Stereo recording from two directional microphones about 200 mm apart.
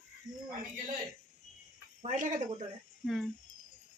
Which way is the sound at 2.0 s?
35° right (ahead or behind).